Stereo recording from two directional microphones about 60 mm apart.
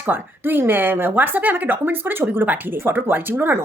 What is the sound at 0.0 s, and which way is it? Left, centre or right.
Speech, right.